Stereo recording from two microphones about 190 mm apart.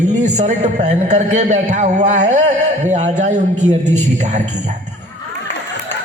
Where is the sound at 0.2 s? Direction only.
40° right (ahead or behind).